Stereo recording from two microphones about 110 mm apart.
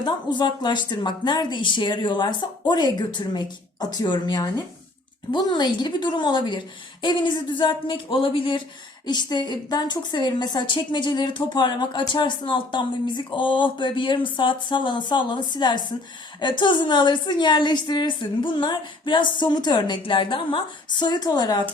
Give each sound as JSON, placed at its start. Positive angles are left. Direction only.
{"t": 0.0, "sound": "a woman's voice", "side_deg": 40}